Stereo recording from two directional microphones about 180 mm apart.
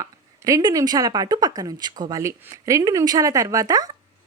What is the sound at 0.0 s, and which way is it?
Speech, 20° right (ahead or behind).